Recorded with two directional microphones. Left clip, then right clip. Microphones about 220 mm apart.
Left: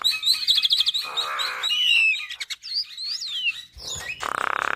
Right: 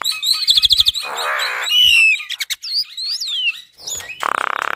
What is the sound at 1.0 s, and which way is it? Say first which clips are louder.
Chirp: right 4 dB; 50° right (ahead or behind).